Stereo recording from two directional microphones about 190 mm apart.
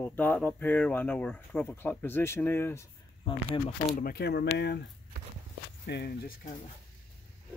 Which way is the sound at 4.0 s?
55° left (ahead or behind).